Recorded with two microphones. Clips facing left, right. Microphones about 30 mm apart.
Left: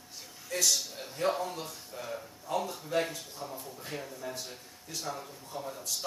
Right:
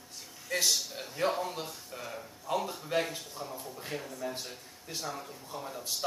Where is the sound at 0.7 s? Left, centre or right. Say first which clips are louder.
Even; centre.